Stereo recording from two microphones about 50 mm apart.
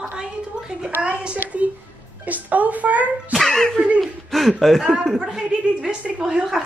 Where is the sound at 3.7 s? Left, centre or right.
Right.